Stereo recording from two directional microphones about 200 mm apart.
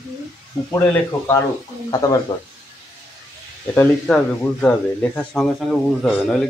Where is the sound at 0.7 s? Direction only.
15° left (ahead or behind).